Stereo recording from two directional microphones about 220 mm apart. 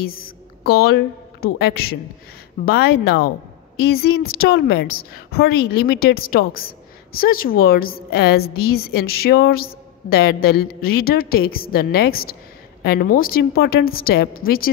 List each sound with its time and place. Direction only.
0.1 s a woman's voice: 45° left (ahead or behind)